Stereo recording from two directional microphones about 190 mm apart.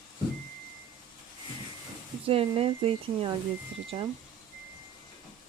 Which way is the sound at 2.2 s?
30° right (ahead or behind).